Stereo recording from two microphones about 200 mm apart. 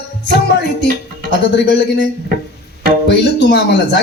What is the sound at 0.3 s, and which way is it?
Music, 55° left (ahead or behind).